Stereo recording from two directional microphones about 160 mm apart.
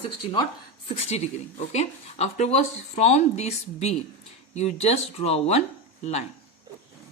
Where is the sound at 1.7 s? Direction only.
45° left (ahead or behind).